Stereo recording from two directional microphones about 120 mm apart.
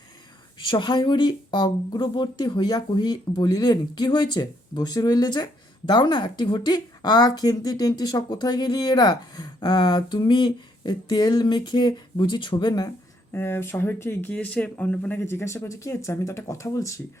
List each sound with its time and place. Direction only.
0.7 s speech: 40° left (ahead or behind)
13.3 s speech: 20° left (ahead or behind)